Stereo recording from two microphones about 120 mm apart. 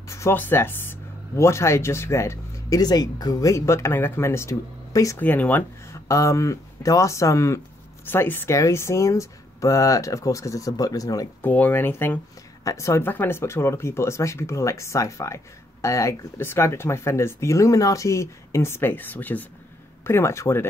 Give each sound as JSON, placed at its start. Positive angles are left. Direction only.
{"t": 0.1, "sound": "speech", "side_deg": 20}
{"t": 5.2, "sound": "speech", "side_deg": 15}
{"t": 6.0, "sound": "speech", "side_deg": 25}
{"t": 11.4, "sound": "speech", "side_deg": 15}